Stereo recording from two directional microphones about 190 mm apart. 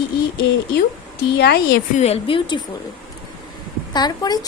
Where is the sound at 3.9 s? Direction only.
20° left (ahead or behind).